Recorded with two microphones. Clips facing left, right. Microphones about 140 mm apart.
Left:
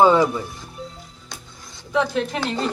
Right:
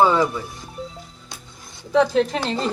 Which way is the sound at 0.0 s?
15° left (ahead or behind).